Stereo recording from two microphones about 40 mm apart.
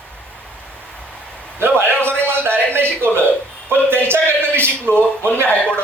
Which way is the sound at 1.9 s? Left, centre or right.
Left.